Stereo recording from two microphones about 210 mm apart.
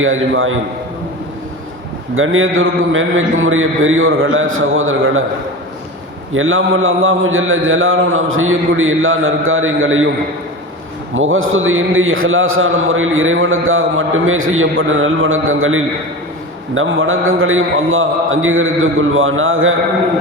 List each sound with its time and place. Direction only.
0.0 s a man's voice: 70° right (ahead or behind)
2.1 s a man's voice: 75° right (ahead or behind)
6.3 s a man's voice: 70° right (ahead or behind)
11.1 s a man's voice: 70° right (ahead or behind)